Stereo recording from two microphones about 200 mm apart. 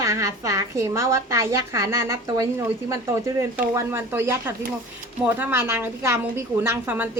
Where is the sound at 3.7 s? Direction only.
10° right (ahead or behind).